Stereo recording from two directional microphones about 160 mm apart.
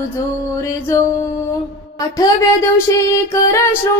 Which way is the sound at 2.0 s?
20° left (ahead or behind).